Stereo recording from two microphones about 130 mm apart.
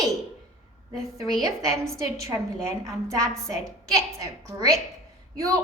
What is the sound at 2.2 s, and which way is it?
A woman's voice, 25° right (ahead or behind).